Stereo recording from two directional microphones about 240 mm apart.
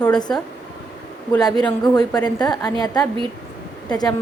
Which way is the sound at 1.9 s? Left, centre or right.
Centre.